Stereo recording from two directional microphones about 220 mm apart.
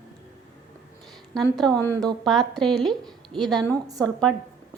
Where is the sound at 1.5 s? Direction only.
5° left (ahead or behind).